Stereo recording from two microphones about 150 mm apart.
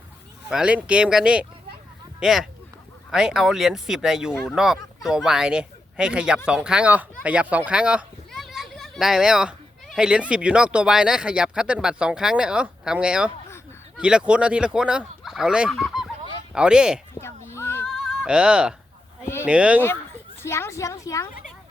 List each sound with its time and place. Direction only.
0.4 s speech: 5° right (ahead or behind)
17.2 s a sound: 15° left (ahead or behind)
17.8 s music: centre (ahead or behind)
19.5 s speech: 10° right (ahead or behind)
20.4 s a woman's voice: 20° left (ahead or behind)